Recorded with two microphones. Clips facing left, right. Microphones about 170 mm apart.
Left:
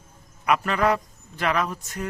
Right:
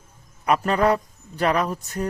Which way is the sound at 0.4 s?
35° right (ahead or behind).